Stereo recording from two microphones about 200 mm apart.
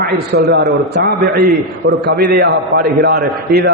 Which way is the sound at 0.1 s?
50° right (ahead or behind).